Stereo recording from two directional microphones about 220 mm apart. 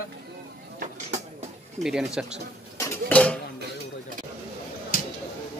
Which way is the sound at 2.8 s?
5° left (ahead or behind).